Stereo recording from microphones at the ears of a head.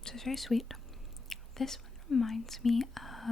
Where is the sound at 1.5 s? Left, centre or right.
Left.